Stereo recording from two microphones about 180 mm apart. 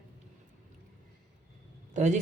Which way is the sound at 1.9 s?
40° right (ahead or behind).